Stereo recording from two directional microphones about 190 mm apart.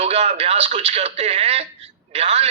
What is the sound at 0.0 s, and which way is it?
A man's voice, 30° right (ahead or behind).